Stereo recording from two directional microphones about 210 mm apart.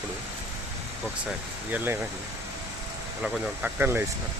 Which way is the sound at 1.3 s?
10° right (ahead or behind).